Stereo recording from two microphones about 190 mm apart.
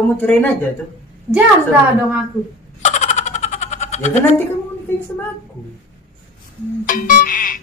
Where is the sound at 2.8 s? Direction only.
40° left (ahead or behind).